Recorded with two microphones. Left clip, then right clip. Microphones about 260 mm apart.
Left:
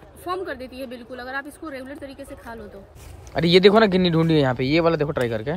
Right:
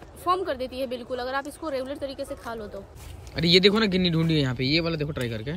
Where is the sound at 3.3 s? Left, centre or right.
Centre.